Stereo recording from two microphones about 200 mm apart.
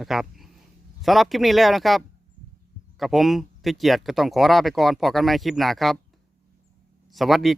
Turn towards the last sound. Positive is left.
turn(degrees=0)  # may be behind; listen again after turning